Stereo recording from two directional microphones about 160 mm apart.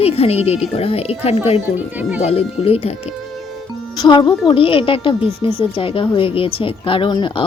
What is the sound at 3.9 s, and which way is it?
Speech, 30° left (ahead or behind).